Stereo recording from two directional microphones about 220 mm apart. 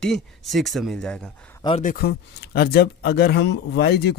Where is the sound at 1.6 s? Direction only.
25° left (ahead or behind).